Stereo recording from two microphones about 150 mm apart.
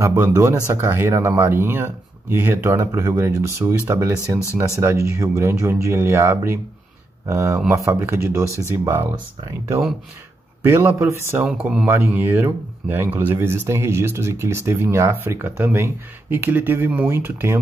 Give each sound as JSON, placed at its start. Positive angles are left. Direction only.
{"t": 0.0, "sound": "speech", "side_deg": -15}
{"t": 10.6, "sound": "speech", "side_deg": -15}